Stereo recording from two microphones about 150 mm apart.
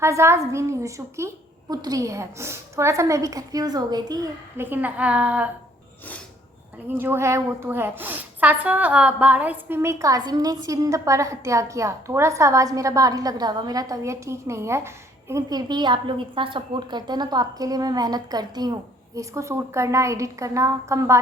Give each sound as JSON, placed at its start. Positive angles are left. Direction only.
{"t": 0.0, "sound": "a woman's voice", "side_deg": -15}
{"t": 4.6, "sound": "a woman's voice", "side_deg": -10}
{"t": 6.9, "sound": "a woman's voice", "side_deg": -15}